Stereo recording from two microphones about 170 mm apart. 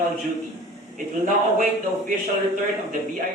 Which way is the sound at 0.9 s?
50° right (ahead or behind).